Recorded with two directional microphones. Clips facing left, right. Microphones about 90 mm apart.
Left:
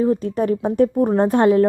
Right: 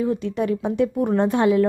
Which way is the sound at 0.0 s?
40° left (ahead or behind).